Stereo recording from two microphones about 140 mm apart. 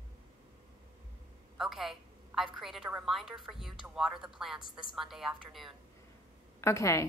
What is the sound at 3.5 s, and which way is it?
A woman's voice, 5° right (ahead or behind).